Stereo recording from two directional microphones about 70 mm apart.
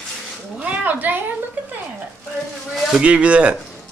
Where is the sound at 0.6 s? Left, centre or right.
Right.